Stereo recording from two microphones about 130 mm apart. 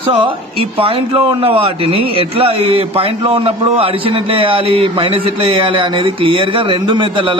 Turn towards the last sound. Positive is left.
turn(degrees=-40)  # may be behind; listen again after turning